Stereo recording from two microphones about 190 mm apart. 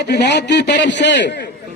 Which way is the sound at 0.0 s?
65° left (ahead or behind).